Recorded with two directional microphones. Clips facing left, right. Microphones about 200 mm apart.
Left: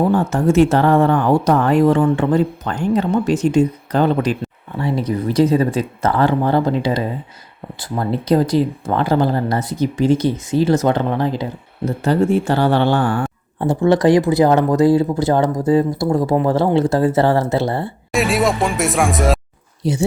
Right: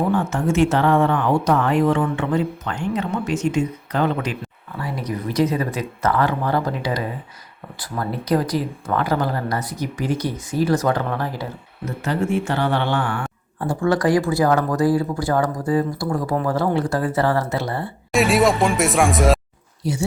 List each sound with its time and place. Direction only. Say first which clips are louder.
0.1 s speech: left 5 dB; 35° left (ahead or behind); by 11.4 s 20° left (ahead or behind)
11.9 s speech: left 6 dB; 35° left (ahead or behind)
18.1 s speech: right 1 dB; centre (ahead or behind)
19.8 s speech: left 5 dB; 20° left (ahead or behind)